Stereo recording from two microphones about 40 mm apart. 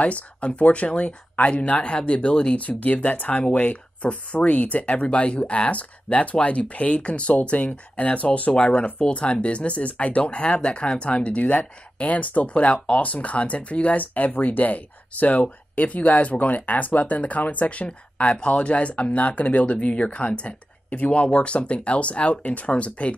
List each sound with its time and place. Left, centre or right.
0.0 s speech: left
2.5 s speech: left